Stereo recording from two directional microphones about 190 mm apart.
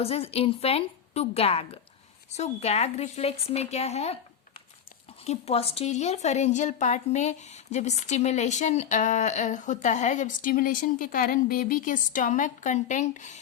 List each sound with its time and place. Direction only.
0.0 s a woman's voice: 30° left (ahead or behind)
5.2 s a woman's voice: 35° left (ahead or behind)